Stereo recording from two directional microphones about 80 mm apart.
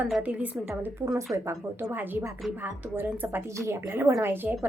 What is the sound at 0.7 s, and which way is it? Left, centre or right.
A woman's voice, right.